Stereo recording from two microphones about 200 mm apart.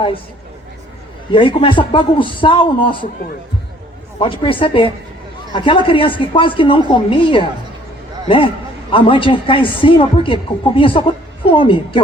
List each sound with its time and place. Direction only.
1.3 s speech: 25° left (ahead or behind)
4.2 s speech: 25° left (ahead or behind)
8.9 s speech: 25° left (ahead or behind)